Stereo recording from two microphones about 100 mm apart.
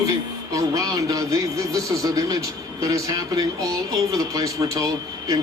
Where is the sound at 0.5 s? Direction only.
35° right (ahead or behind).